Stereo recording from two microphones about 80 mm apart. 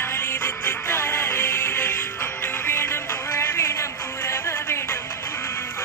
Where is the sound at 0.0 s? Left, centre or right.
Left.